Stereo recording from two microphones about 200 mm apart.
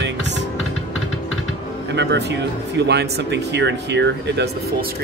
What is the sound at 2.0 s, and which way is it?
Speech, 60° right (ahead or behind).